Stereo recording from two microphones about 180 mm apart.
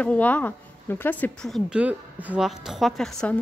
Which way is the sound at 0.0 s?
10° left (ahead or behind).